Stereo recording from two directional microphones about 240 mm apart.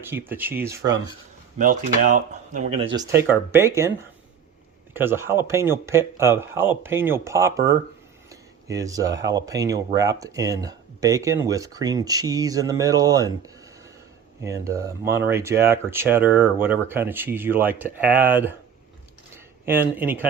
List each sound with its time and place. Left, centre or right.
0.0 s speech: centre
1.5 s speech: right
2.8 s speech: centre
4.9 s speech: centre
8.3 s a sound: centre
9.2 s speech: centre
19.6 s speech: centre